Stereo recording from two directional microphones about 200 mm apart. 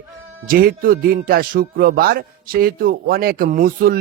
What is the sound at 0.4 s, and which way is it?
Speech, 45° right (ahead or behind).